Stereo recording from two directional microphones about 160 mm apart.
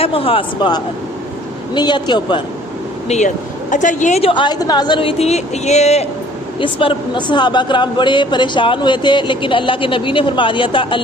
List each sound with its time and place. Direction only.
0.0 s a man's voice: 35° left (ahead or behind)
3.1 s speech: 50° left (ahead or behind)
4.2 s a man's voice: 30° left (ahead or behind)
6.6 s a man's voice: 30° left (ahead or behind)